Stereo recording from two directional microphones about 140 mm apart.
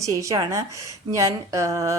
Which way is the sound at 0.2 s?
25° right (ahead or behind).